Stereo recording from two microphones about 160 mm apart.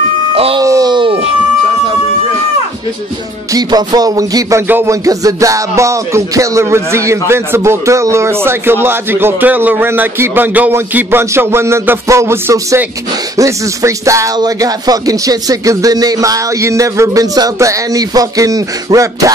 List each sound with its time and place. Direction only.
0.6 s wail: 25° right (ahead or behind)
3.5 s music: 25° right (ahead or behind)
13.4 s speech: 20° right (ahead or behind)